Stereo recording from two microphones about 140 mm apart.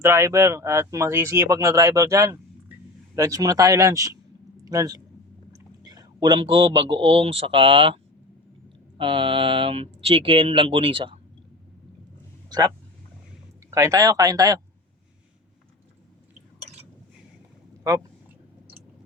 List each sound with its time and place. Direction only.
0.0 s a man's voice: 20° right (ahead or behind); by 7.9 s 40° right (ahead or behind)
9.0 s speech: 40° right (ahead or behind)
12.5 s speech: 30° right (ahead or behind)
17.9 s speech: 20° right (ahead or behind)